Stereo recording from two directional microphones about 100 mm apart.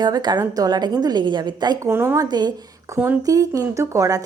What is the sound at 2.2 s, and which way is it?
Speech, 45° right (ahead or behind).